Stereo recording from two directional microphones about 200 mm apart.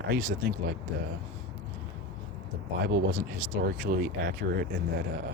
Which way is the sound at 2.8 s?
45° right (ahead or behind).